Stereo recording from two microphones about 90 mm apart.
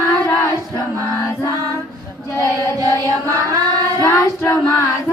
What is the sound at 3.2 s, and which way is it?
Child singing, 35° right (ahead or behind).